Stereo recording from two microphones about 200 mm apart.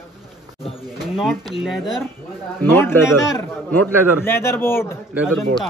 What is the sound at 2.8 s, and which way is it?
A man's voice, 10° left (ahead or behind).